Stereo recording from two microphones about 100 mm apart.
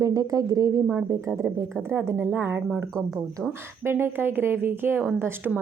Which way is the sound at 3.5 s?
25° right (ahead or behind).